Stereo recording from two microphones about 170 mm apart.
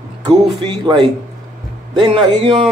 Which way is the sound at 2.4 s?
30° right (ahead or behind).